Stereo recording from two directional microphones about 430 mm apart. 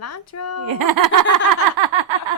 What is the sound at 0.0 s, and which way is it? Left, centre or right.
Speech, left.